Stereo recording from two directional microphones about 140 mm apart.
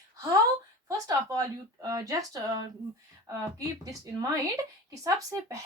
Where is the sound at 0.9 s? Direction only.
25° right (ahead or behind).